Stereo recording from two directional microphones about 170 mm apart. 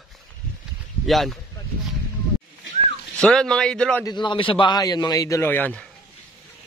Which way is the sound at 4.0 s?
25° left (ahead or behind).